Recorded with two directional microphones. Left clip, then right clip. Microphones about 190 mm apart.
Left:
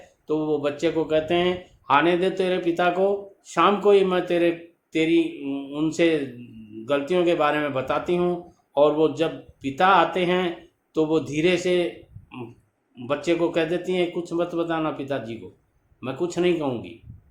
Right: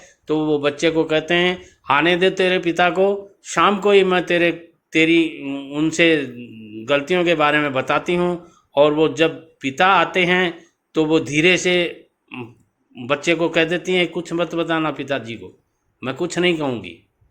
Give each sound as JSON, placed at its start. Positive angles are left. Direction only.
{"t": 0.3, "sound": "speech", "side_deg": -35}
{"t": 13.0, "sound": "speech", "side_deg": -35}